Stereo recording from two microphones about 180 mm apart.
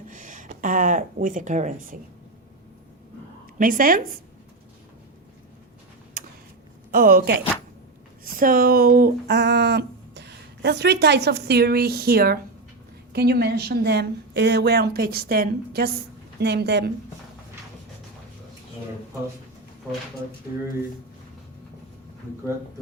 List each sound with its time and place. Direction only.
0.1 s speech: 45° right (ahead or behind)
3.6 s a woman's voice: 50° right (ahead or behind)
6.2 s a sound: 55° right (ahead or behind)
6.9 s speech: 55° right (ahead or behind)